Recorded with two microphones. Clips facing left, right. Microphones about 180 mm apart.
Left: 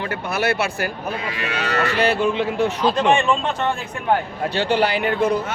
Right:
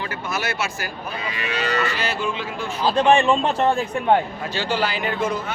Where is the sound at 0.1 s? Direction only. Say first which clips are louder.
Left 5 dB; 60° left (ahead or behind).